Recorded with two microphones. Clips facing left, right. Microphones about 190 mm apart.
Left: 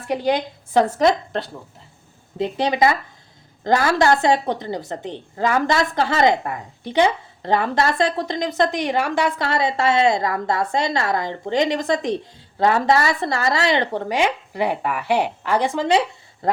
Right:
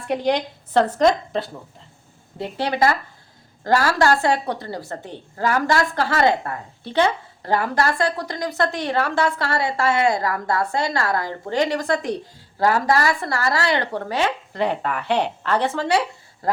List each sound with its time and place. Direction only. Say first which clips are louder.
0.1 s a woman's voice: even; 5° left (ahead or behind)
2.4 s a woman's voice: left 2 dB; 20° left (ahead or behind)